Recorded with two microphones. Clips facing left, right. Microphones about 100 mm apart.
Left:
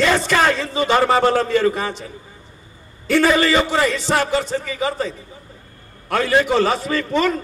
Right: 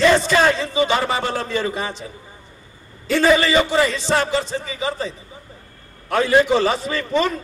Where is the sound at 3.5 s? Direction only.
55° left (ahead or behind).